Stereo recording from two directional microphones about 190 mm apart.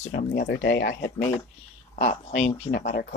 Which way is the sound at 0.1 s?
60° left (ahead or behind).